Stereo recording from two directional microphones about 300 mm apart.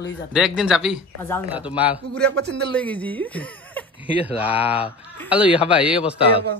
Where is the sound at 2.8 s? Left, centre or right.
Centre.